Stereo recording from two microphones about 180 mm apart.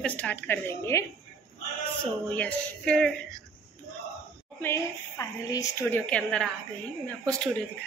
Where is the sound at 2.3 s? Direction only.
5° left (ahead or behind).